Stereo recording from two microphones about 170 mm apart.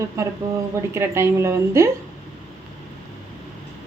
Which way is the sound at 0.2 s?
20° right (ahead or behind).